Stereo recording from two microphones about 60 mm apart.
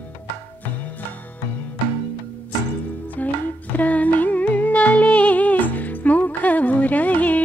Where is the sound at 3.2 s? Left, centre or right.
Left.